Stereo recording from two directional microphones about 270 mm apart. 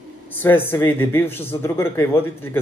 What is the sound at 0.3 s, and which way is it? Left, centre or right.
A man's voice, centre.